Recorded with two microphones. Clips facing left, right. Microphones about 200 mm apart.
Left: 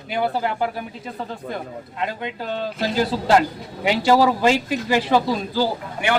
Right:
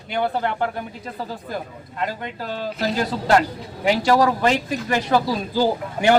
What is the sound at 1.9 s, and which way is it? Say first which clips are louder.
Speech: even; centre (ahead or behind).